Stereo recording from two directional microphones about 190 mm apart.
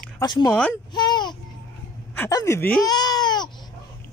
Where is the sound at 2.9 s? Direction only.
20° left (ahead or behind).